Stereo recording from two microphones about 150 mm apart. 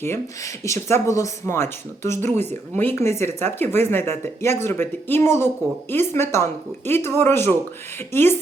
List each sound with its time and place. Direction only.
0.0 s speech: 20° left (ahead or behind)